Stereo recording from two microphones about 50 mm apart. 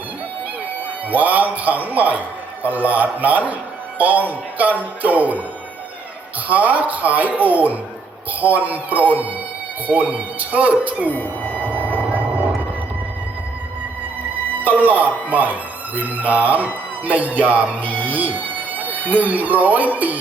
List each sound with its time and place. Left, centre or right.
1.1 s speech: right
6.5 s speech: right
11.1 s music: left
11.7 s a sound: right
14.6 s speech: right
17.8 s speech: left
18.1 s speech: right